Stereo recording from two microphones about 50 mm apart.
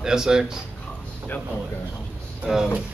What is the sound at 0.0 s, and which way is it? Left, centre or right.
Speech, centre.